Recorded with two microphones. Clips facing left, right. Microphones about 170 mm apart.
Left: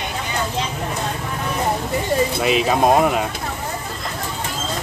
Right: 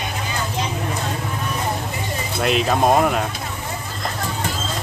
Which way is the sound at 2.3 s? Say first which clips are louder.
Right 4 dB; 5° left (ahead or behind).